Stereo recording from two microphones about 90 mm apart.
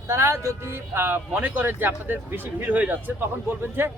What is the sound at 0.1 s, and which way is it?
Speech, 30° right (ahead or behind).